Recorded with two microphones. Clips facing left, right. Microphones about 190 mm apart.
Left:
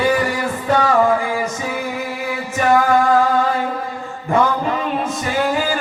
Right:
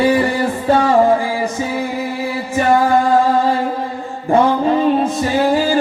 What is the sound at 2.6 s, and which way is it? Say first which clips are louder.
Music: right 1 dB; 30° right (ahead or behind).